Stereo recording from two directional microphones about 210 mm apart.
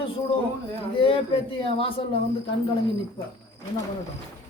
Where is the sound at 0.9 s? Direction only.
25° left (ahead or behind).